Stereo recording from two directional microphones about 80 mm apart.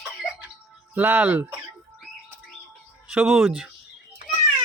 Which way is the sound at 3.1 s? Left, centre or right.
Centre.